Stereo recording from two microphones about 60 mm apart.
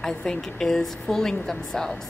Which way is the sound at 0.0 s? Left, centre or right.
Centre.